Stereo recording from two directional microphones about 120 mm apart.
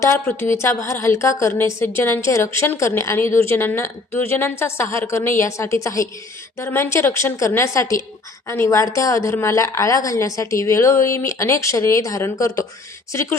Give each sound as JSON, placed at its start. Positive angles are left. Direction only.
{"t": 0.0, "sound": "a woman's voice", "side_deg": 20}